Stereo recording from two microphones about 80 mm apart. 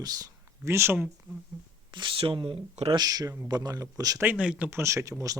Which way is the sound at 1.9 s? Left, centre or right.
Right.